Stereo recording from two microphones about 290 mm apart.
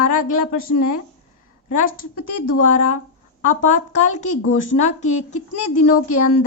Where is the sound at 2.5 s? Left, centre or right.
Left.